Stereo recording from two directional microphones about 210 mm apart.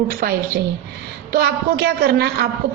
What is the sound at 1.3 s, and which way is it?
A woman's voice, 50° right (ahead or behind).